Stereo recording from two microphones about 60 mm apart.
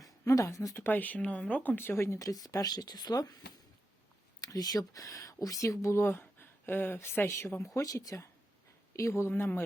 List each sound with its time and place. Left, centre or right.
0.0 s speech: left
0.8 s speech: left
1.7 s speech: left
2.1 s speech: left
4.4 s speech: left
7.6 s speech: left
8.9 s speech: left
9.3 s a man's voice: left